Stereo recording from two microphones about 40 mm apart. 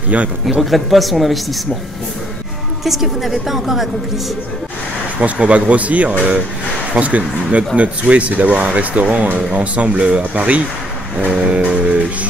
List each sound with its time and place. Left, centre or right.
0.1 s speech: right
0.6 s a woman's voice: centre
2.8 s a woman's voice: centre
5.2 s speech: right